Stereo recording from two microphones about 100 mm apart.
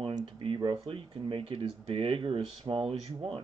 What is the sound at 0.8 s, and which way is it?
Speech, 65° right (ahead or behind).